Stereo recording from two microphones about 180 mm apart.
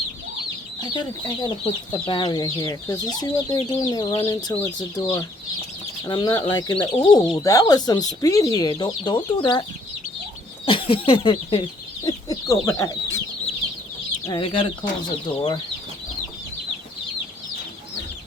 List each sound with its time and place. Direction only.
0.8 s speech: 25° left (ahead or behind)
10.7 s speech: 30° left (ahead or behind)
12.0 s speech: 20° left (ahead or behind)
14.3 s speech: 25° left (ahead or behind)